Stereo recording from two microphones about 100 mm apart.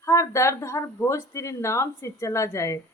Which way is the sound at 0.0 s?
30° left (ahead or behind).